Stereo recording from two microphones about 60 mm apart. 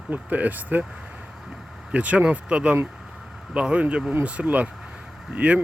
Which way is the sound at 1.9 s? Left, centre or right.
Right.